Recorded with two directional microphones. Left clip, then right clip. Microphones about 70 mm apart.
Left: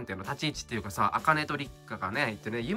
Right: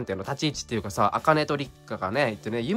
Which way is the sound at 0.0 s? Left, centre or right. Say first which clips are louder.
Right 5 dB; right.